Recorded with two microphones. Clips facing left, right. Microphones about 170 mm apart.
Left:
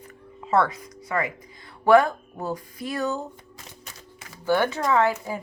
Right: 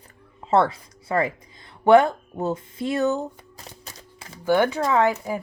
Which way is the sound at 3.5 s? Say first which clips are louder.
Right 2 dB; 35° right (ahead or behind).